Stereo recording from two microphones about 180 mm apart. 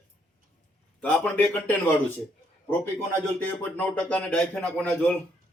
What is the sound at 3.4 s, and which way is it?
Speech, 10° left (ahead or behind).